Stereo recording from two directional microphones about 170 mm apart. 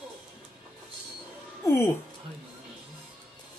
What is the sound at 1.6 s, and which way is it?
Music, 15° left (ahead or behind).